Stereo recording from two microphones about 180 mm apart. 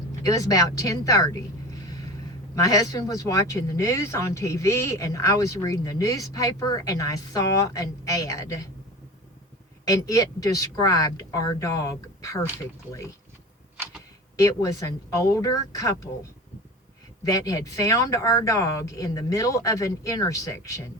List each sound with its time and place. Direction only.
0.1 s speech: 20° left (ahead or behind)
1.8 s a sound: 20° left (ahead or behind)
2.6 s speech: 20° left (ahead or behind)
9.8 s speech: 20° left (ahead or behind)
14.3 s speech: 20° left (ahead or behind)
17.2 s speech: 20° left (ahead or behind)